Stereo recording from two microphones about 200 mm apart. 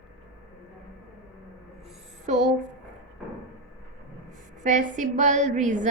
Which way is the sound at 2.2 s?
35° right (ahead or behind).